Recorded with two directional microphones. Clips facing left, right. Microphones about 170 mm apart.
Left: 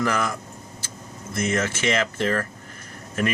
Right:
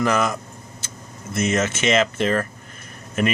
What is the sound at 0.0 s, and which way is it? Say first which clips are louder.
Speech: right 4 dB; 20° right (ahead or behind).